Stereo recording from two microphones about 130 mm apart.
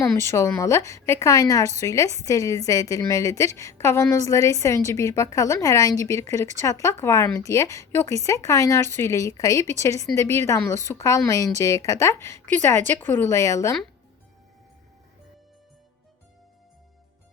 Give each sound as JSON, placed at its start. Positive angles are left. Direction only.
{"t": 0.0, "sound": "speech", "side_deg": 20}